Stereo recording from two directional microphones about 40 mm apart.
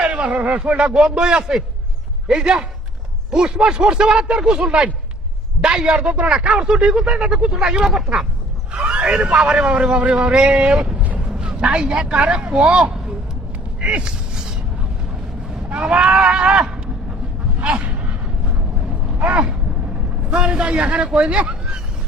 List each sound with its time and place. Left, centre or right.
0.0 s speech: right
0.8 s speech: right
8.8 s vehicle: right
9.0 s a man's voice: right
13.8 s a sound: right
15.7 s speech: right
17.6 s a sound: right
20.3 s speech: right